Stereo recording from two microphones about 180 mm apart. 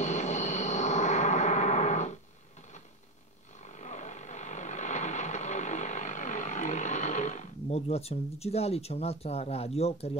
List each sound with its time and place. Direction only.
0.0 s gong: 40° left (ahead or behind)
3.6 s vehicle: 40° left (ahead or behind)